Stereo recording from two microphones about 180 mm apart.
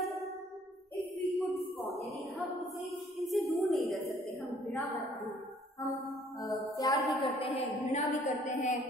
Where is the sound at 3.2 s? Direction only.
Centre (ahead or behind).